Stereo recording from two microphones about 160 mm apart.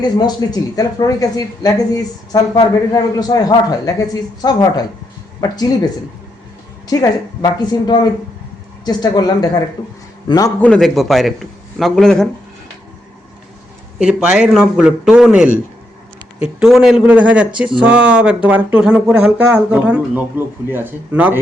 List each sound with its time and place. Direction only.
0.2 s a man's voice: 25° left (ahead or behind)
6.9 s a man's voice: 25° left (ahead or behind)
10.6 s speech: 5° left (ahead or behind)
14.0 s speech: 5° right (ahead or behind)